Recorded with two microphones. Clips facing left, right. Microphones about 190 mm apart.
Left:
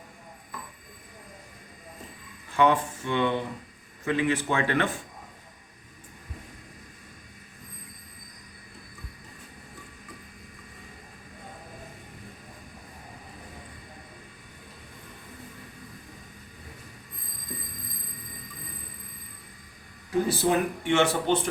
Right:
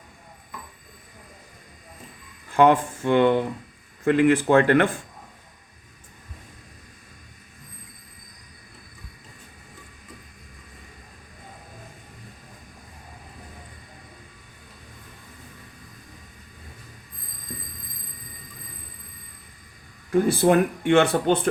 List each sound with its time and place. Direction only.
2.6 s speech: 50° right (ahead or behind)
20.2 s speech: 55° right (ahead or behind)